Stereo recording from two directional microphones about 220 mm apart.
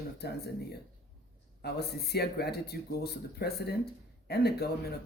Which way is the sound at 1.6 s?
45° left (ahead or behind).